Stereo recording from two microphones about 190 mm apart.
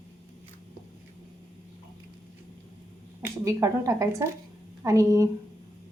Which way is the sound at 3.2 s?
15° right (ahead or behind).